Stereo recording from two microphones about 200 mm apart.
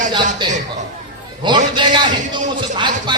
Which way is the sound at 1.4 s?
25° right (ahead or behind).